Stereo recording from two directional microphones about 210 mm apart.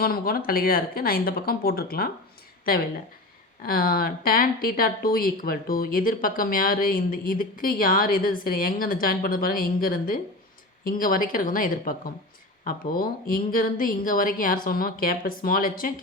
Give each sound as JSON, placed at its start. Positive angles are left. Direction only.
{"t": 0.0, "sound": "speech", "side_deg": 45}
{"t": 3.6, "sound": "speech", "side_deg": 45}